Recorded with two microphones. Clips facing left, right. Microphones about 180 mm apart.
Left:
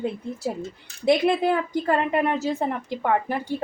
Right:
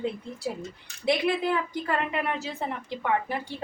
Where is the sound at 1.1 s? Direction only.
45° left (ahead or behind).